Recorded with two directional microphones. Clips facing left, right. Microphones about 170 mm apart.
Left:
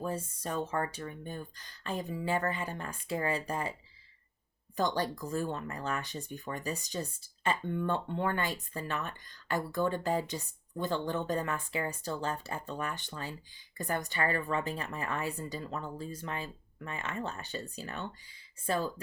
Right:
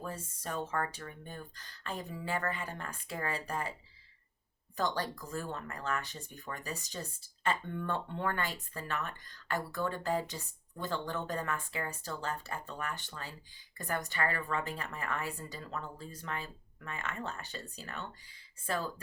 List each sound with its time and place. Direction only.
0.0 s a woman's voice: 25° left (ahead or behind)
4.8 s a woman's voice: 20° left (ahead or behind)